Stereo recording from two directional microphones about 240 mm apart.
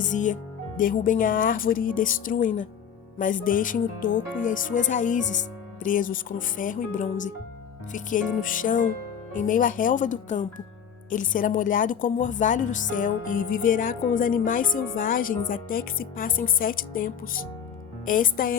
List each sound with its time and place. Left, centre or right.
0.0 s speech: left